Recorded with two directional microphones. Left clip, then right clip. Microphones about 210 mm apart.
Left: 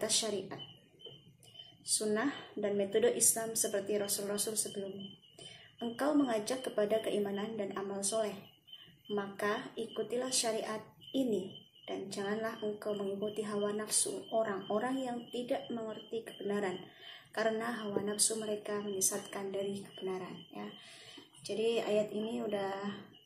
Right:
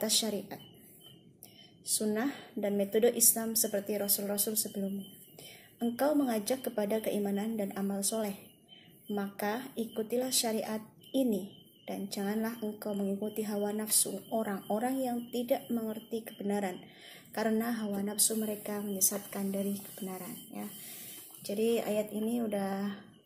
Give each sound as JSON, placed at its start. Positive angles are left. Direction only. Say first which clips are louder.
{"t": 0.0, "sound": "a woman's voice", "louder": "right 2 dB", "side_deg": -45}
{"t": 1.9, "sound": "a woman's voice", "louder": "even", "side_deg": -45}
{"t": 5.8, "sound": "a woman's voice", "louder": "right 3 dB", "side_deg": -45}